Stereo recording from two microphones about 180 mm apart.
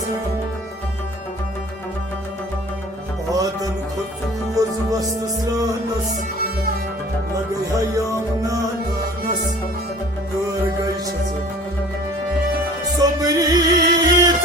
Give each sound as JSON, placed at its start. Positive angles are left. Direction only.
{"t": 3.3, "sound": "music", "side_deg": -20}
{"t": 10.5, "sound": "music", "side_deg": -20}
{"t": 13.0, "sound": "music", "side_deg": -20}